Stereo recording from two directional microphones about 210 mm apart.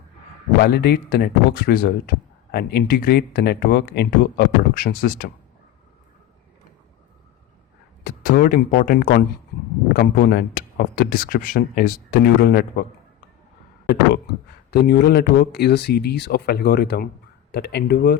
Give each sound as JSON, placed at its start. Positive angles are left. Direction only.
{"t": 0.6, "sound": "speech", "side_deg": 50}
{"t": 8.0, "sound": "speech", "side_deg": 40}
{"t": 14.7, "sound": "speech", "side_deg": 50}